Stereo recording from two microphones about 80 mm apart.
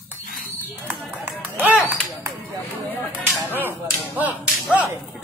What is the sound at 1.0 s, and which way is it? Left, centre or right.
Run, right.